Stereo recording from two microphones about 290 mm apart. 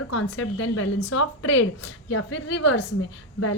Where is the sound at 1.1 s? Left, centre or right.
Left.